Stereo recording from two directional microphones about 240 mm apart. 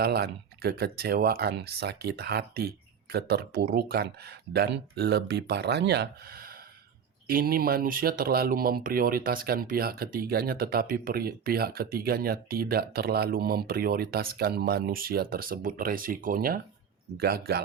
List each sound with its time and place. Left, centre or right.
0.0 s speech: right